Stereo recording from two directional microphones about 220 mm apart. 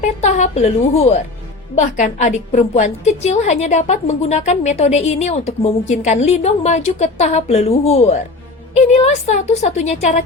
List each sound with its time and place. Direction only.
0.2 s a woman's voice: 30° left (ahead or behind)